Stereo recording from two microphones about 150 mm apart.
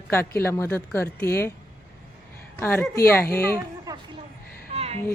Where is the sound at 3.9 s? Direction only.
20° right (ahead or behind).